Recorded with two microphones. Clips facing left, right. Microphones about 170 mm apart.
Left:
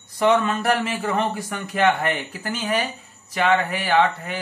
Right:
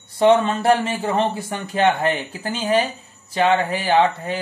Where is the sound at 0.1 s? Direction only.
30° right (ahead or behind).